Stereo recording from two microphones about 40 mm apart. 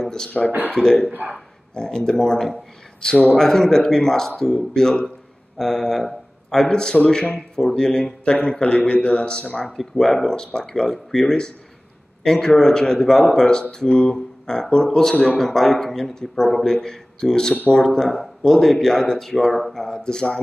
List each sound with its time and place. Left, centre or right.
0.0 s a sound: centre
0.5 s speech: right
0.7 s speech: centre
15.2 s speech: centre